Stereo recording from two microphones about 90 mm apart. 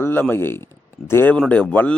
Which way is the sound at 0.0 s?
25° left (ahead or behind).